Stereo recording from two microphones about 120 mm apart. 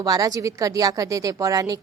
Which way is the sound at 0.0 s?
30° right (ahead or behind).